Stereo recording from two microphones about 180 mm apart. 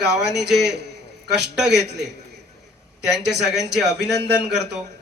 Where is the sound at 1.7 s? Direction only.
70° right (ahead or behind).